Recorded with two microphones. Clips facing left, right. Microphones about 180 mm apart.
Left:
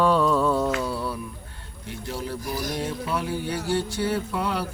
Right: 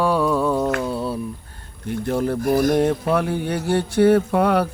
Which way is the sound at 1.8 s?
55° right (ahead or behind).